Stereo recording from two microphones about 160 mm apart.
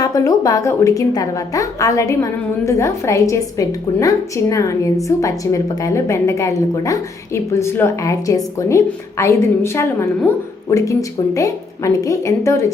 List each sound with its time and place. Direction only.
0.0 s a woman's voice: 20° left (ahead or behind)